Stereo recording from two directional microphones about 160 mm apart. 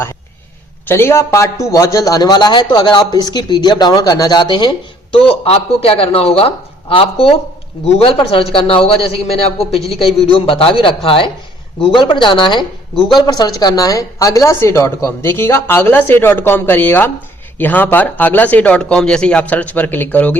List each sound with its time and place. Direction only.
0.9 s a woman's voice: 15° left (ahead or behind)